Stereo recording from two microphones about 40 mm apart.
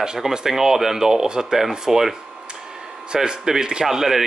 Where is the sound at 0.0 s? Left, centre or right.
Centre.